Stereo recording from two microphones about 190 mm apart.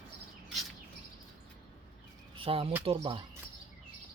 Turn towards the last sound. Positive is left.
turn(degrees=-30)  # may be behind; listen again after turning